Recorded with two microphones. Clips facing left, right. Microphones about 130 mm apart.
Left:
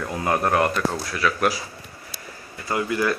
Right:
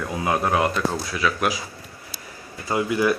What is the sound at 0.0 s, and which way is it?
Speech, 5° right (ahead or behind).